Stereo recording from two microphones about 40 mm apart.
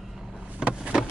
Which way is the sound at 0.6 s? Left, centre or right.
Right.